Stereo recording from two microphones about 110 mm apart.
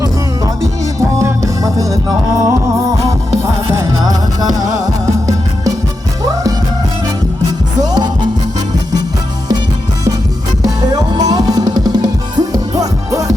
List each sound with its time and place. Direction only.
0.0 s music: 30° right (ahead or behind)
3.8 s music: 35° right (ahead or behind)
7.8 s music: 40° right (ahead or behind)
10.6 s music: 35° right (ahead or behind)